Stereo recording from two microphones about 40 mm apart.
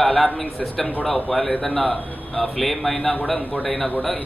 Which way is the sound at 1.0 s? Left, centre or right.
Centre.